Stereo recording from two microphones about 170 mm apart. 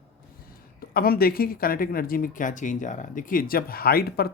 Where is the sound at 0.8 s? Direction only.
60° left (ahead or behind).